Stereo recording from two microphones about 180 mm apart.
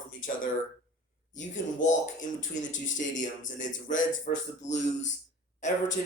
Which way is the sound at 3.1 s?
45° left (ahead or behind).